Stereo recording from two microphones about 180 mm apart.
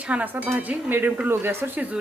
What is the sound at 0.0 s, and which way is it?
Speech, 5° right (ahead or behind).